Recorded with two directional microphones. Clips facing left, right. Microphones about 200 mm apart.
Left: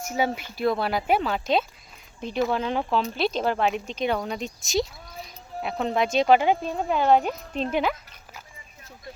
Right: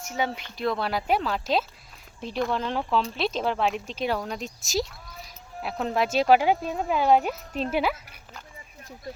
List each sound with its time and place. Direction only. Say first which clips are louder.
0.0 s speech: left 3 dB; 10° left (ahead or behind); by 8.2 s 10° right (ahead or behind)